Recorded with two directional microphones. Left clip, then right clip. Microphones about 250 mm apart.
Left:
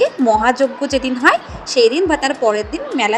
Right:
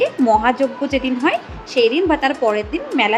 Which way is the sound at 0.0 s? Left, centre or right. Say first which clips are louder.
Left 1 dB; left.